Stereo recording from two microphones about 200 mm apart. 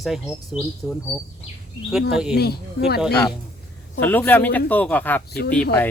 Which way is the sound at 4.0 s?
10° left (ahead or behind).